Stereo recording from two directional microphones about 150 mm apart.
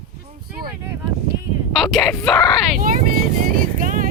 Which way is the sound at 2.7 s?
70° right (ahead or behind).